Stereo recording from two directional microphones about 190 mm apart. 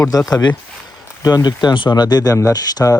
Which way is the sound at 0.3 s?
20° left (ahead or behind).